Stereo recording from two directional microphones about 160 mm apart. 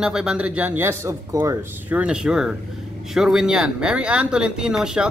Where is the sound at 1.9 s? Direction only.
5° right (ahead or behind).